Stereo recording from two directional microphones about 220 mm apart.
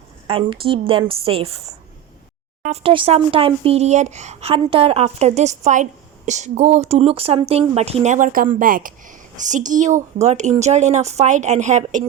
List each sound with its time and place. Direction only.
0.3 s a woman's voice: 25° right (ahead or behind)